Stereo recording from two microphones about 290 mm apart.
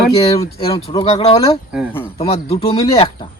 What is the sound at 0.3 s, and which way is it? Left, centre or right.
Speech, centre.